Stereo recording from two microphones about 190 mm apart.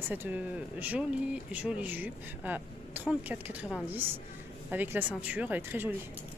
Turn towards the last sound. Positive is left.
turn(degrees=-10)  # may be behind; listen again after turning